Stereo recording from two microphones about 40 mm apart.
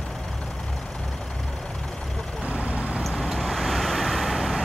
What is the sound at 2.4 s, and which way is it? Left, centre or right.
Vehicle, right.